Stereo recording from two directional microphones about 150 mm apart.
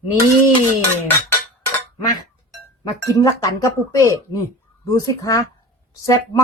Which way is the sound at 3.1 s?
20° left (ahead or behind).